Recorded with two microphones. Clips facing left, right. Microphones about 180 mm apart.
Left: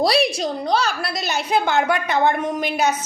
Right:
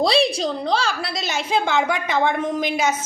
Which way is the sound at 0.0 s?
25° right (ahead or behind).